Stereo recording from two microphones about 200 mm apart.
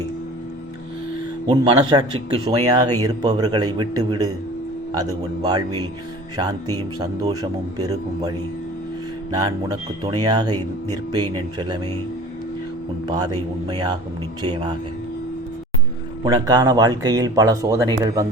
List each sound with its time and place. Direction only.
1.5 s speech: 25° right (ahead or behind)
13.1 s speech: 20° right (ahead or behind)
16.2 s speech: 20° right (ahead or behind)